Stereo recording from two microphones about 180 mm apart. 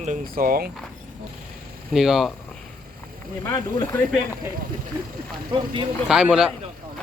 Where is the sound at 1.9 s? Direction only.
Centre (ahead or behind).